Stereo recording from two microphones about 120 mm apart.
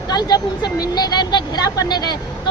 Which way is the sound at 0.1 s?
35° left (ahead or behind).